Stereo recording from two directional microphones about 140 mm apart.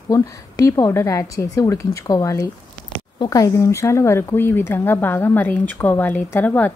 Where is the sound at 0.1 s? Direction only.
25° left (ahead or behind).